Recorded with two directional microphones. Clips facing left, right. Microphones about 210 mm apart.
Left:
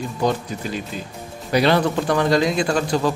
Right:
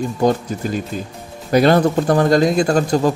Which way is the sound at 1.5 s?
45° right (ahead or behind).